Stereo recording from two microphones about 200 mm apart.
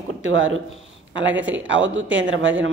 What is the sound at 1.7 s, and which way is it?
Speech, 70° right (ahead or behind).